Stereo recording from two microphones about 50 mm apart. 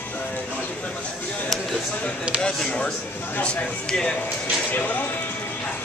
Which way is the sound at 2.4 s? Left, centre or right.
Centre.